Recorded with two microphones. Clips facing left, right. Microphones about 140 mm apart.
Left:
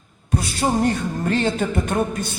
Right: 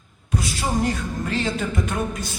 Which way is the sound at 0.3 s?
55° left (ahead or behind).